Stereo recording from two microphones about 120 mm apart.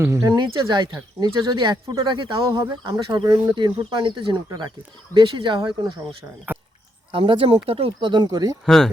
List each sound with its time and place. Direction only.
0.0 s speech: 25° right (ahead or behind)
0.3 s speech: 40° right (ahead or behind)
3.5 s speech: 40° right (ahead or behind)
6.5 s a sound: 15° right (ahead or behind)
7.1 s speech: 45° right (ahead or behind)
8.1 s speech: 35° right (ahead or behind)
8.6 s speech: 5° left (ahead or behind)